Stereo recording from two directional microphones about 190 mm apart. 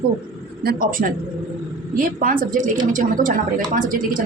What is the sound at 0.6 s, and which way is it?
A woman's voice, 50° right (ahead or behind).